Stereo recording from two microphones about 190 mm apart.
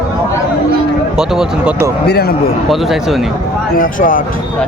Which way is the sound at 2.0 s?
55° left (ahead or behind).